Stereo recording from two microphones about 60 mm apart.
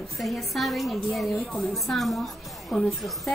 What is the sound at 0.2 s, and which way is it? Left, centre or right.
Speech, centre.